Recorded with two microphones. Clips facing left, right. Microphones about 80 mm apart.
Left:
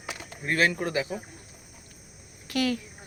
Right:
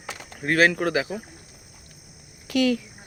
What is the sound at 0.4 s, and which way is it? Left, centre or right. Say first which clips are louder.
Speech: right 5 dB; right.